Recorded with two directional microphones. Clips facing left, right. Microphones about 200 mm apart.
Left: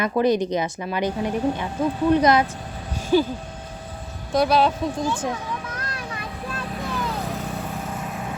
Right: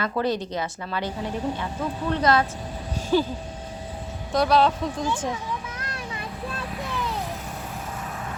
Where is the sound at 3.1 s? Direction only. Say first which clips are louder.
Left 3 dB; 5° left (ahead or behind).